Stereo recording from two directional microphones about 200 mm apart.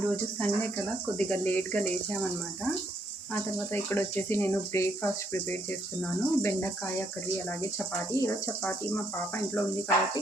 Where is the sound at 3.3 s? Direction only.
10° left (ahead or behind).